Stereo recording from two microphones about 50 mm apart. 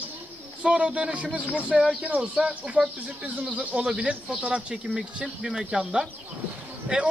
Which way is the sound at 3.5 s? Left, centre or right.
Right.